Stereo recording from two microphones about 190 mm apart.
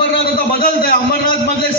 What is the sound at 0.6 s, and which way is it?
Speech, 50° left (ahead or behind).